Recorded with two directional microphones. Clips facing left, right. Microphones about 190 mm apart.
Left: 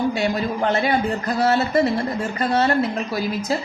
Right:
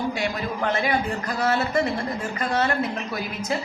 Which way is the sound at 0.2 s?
25° left (ahead or behind).